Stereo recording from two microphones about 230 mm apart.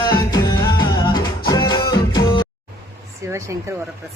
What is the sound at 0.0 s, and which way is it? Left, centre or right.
Music, centre.